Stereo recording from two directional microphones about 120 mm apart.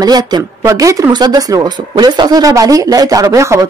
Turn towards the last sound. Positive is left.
turn(degrees=-25)  # may be behind; listen again after turning